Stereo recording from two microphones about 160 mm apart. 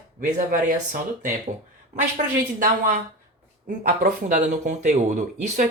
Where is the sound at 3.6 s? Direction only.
55° right (ahead or behind).